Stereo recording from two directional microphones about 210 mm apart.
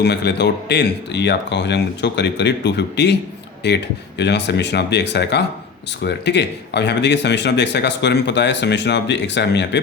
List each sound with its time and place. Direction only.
0.0 s a man's voice: 50° left (ahead or behind)